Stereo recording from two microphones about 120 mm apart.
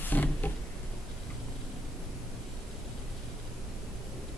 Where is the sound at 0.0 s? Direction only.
15° left (ahead or behind).